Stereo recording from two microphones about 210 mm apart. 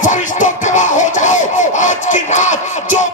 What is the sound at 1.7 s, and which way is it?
Crowd, 35° left (ahead or behind).